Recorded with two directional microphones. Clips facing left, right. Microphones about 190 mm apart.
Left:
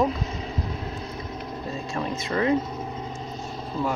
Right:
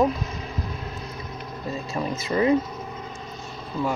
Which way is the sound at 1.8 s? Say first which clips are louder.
Right 1 dB; 5° right (ahead or behind).